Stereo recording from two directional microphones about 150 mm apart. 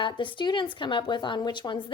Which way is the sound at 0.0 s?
35° left (ahead or behind).